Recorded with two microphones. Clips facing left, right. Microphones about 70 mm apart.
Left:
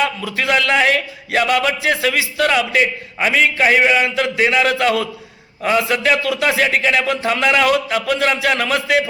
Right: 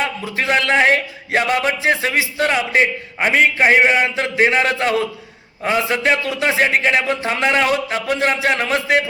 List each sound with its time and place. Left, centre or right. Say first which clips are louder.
0.3 s a man's voice: even; right